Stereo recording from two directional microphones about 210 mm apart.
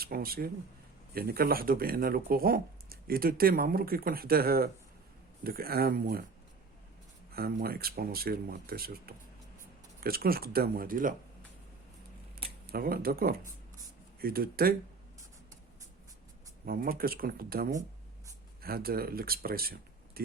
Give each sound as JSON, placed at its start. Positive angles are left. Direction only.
{"t": 0.0, "sound": "speech", "side_deg": -45}
{"t": 7.3, "sound": "speech", "side_deg": -45}
{"t": 12.7, "sound": "speech", "side_deg": -45}
{"t": 16.6, "sound": "speech", "side_deg": -45}